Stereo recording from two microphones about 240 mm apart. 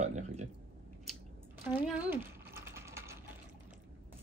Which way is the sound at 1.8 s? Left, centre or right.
Centre.